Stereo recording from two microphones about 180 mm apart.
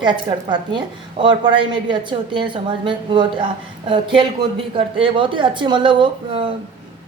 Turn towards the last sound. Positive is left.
turn(degrees=-25)  # may be behind; listen again after turning